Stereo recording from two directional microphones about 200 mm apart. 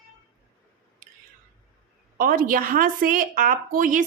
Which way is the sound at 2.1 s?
45° right (ahead or behind).